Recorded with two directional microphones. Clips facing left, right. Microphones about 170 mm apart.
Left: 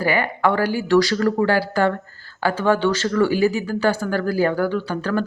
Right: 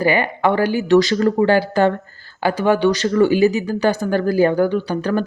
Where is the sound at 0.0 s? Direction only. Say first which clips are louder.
Right 3 dB; 20° right (ahead or behind).